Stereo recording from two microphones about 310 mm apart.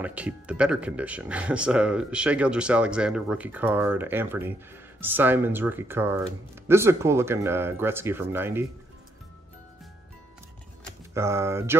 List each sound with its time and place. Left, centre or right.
0.0 s speech: centre
11.1 s speech: centre